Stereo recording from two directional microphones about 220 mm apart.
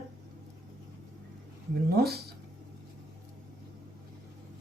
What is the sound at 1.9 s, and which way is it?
Speech, 45° right (ahead or behind).